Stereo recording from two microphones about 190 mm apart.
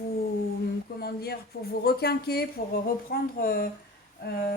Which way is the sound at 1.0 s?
55° left (ahead or behind).